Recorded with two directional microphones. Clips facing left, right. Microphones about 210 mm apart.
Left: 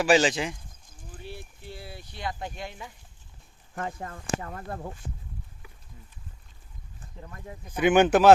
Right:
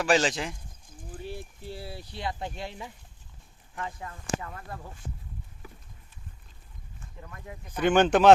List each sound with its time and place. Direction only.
0.0 s speech: 5° left (ahead or behind)
1.2 s a sound: 40° right (ahead or behind)
3.8 s speech: 45° left (ahead or behind)
7.0 s speech: 25° left (ahead or behind)
7.7 s speech: 10° left (ahead or behind)